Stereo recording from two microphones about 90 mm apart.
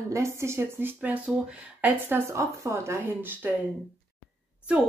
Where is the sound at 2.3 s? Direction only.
35° right (ahead or behind).